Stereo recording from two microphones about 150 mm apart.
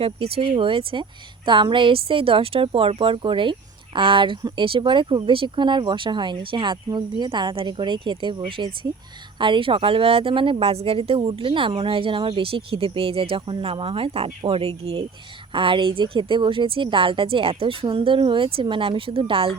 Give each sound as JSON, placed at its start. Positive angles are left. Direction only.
{"t": 0.0, "sound": "speech", "side_deg": -40}